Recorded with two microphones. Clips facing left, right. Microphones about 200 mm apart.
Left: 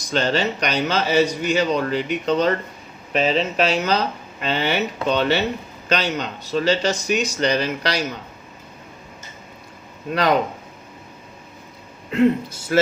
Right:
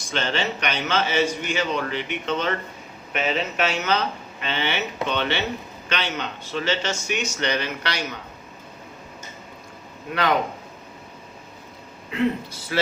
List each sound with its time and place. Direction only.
0.0 s a man's voice: 40° left (ahead or behind)
12.1 s speech: 45° left (ahead or behind)